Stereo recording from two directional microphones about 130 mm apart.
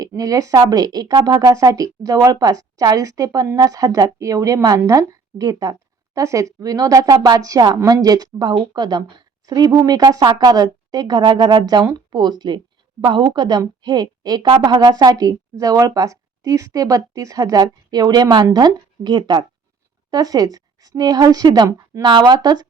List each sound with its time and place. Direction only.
0.2 s a woman's voice: 25° right (ahead or behind)